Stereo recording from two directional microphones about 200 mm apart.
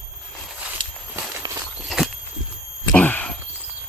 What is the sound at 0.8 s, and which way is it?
Walk, 25° right (ahead or behind).